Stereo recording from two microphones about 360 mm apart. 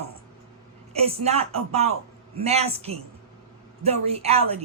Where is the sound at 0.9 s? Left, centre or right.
Centre.